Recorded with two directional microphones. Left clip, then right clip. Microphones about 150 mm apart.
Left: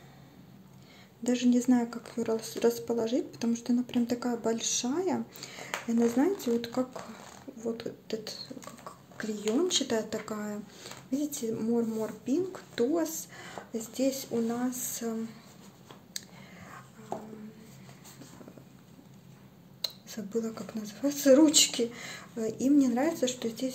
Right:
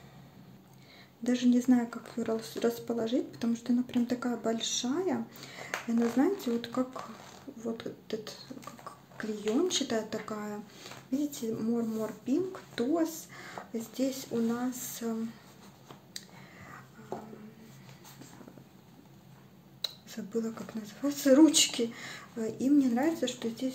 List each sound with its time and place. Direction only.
1.2 s a woman's voice: 10° left (ahead or behind)
8.8 s a sound: 15° left (ahead or behind)
9.7 s a woman's voice: 15° left (ahead or behind)
16.1 s clicking: 20° left (ahead or behind)
19.8 s a woman's voice: 15° left (ahead or behind)